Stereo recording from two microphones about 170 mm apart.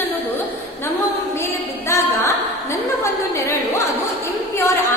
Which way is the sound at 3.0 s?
15° left (ahead or behind).